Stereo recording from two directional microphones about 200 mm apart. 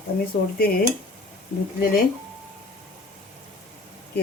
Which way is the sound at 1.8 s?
45° left (ahead or behind).